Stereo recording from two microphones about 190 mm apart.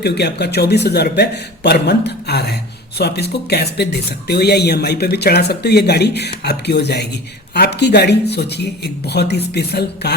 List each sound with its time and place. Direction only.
0.0 s speech: 60° left (ahead or behind)